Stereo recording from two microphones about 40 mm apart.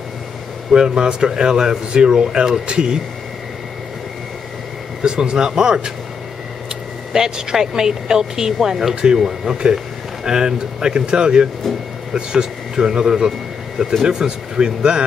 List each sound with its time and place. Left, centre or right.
0.7 s speech: centre
5.0 s speech: centre
7.1 s a woman's voice: centre